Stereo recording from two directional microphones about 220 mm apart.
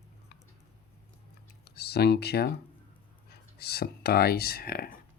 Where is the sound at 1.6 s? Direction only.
45° left (ahead or behind).